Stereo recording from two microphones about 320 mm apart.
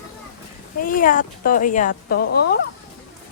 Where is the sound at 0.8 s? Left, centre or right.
Left.